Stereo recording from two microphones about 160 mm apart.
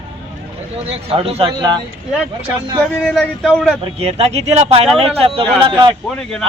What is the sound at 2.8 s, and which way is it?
Speech, 5° left (ahead or behind).